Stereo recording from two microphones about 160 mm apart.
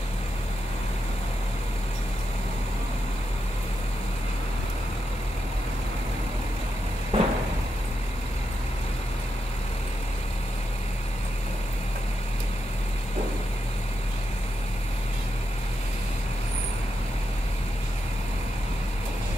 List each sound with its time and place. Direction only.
7.1 s vehicle: 40° right (ahead or behind)